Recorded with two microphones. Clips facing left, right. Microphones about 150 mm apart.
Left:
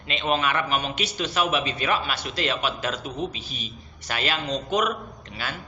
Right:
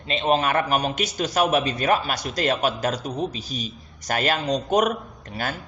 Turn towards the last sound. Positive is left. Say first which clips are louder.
# right 5 dB
turn(degrees=-45)  # may be behind; listen again after turning